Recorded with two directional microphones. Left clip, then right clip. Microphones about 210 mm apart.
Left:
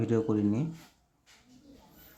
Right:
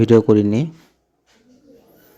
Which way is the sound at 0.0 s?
35° right (ahead or behind).